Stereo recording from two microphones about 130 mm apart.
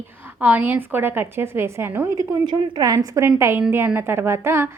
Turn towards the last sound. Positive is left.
turn(degrees=-20)  # may be behind; listen again after turning